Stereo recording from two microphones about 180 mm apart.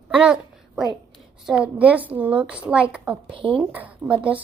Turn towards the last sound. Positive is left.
turn(degrees=-5)  # may be behind; listen again after turning